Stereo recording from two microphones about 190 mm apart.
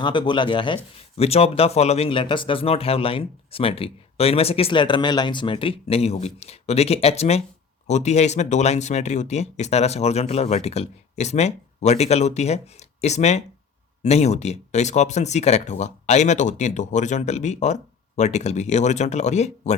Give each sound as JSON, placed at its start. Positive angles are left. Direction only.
{"t": 0.0, "sound": "speech", "side_deg": 25}